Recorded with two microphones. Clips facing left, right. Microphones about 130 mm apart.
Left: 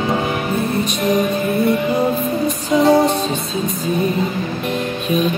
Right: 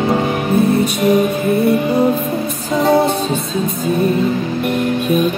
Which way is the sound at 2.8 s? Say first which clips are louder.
Even; centre (ahead or behind).